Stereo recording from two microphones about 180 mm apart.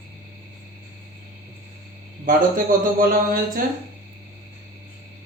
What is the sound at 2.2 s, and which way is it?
Speech, 50° right (ahead or behind).